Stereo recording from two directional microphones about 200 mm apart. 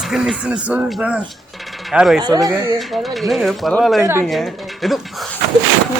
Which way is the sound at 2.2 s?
20° right (ahead or behind).